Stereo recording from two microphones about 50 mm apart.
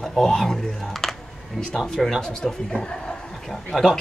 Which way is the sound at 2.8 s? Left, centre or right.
Centre.